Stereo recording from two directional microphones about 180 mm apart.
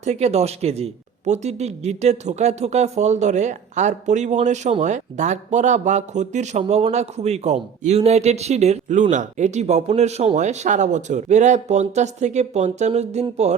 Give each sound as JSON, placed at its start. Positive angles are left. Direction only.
{"t": 0.0, "sound": "speech", "side_deg": -35}